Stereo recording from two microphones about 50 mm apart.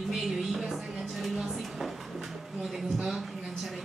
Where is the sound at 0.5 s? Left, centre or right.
Centre.